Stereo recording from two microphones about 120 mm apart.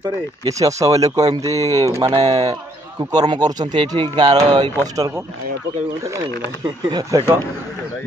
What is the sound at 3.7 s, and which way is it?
Speech, 45° right (ahead or behind).